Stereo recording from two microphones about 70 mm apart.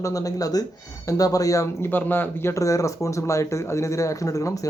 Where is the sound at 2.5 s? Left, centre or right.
Left.